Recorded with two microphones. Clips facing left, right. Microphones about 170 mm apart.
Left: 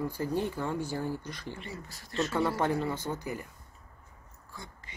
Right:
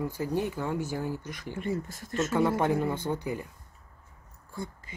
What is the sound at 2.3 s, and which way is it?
Speech, 15° right (ahead or behind).